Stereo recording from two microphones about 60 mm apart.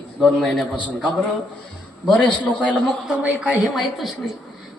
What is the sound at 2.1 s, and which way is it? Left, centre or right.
Speech, left.